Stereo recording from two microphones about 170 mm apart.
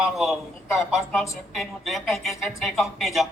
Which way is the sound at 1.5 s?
Centre (ahead or behind).